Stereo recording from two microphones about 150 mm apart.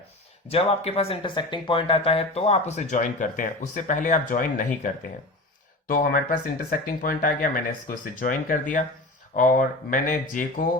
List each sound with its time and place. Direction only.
0.4 s speech: 40° left (ahead or behind); by 4.6 s 65° left (ahead or behind)
5.9 s speech: 65° left (ahead or behind)